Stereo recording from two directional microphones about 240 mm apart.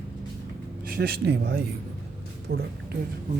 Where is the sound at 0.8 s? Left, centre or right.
Right.